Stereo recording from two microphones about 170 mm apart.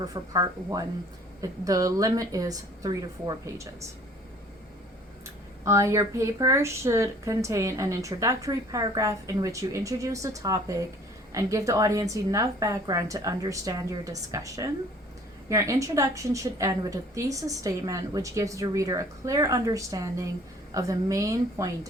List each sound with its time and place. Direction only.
0.0 s speech: 20° right (ahead or behind)
5.2 s speech: 15° right (ahead or behind)